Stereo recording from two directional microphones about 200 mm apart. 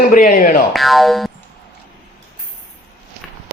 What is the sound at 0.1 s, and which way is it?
Speech, 45° left (ahead or behind).